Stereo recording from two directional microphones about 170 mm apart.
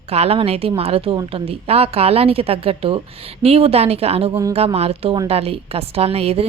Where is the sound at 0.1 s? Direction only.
35° right (ahead or behind).